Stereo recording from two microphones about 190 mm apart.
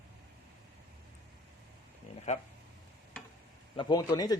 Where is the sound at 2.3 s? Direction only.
35° left (ahead or behind).